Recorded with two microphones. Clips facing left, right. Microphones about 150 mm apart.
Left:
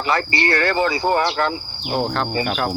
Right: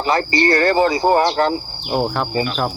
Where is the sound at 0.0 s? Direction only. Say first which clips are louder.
Right 4 dB; 35° right (ahead or behind).